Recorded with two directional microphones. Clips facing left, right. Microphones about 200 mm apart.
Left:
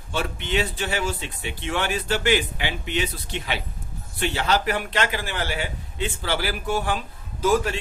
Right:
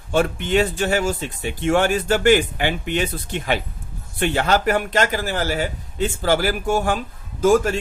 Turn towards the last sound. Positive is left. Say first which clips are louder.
# right 5 dB
turn(degrees=-45)  # may be behind; listen again after turning